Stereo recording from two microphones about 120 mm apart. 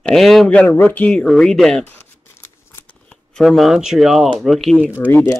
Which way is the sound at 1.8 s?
20° left (ahead or behind).